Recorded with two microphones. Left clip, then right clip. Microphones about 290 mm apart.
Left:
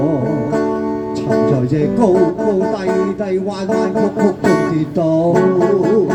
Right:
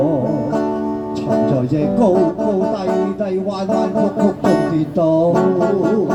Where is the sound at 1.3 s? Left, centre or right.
Left.